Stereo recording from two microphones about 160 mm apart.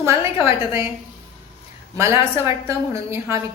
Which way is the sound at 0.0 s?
15° right (ahead or behind).